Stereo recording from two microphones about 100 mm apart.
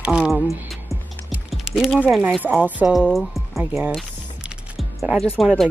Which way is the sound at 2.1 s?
10° right (ahead or behind).